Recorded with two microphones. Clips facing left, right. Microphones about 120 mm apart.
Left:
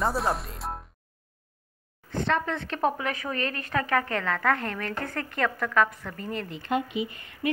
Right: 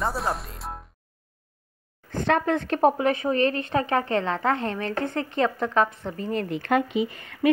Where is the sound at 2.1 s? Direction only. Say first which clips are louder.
Right 4 dB; 50° right (ahead or behind).